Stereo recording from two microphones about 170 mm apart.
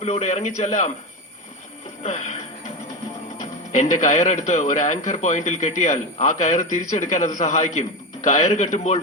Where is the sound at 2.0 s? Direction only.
40° left (ahead or behind).